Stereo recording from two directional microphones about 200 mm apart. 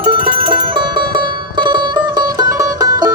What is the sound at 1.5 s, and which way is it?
Music, 25° right (ahead or behind).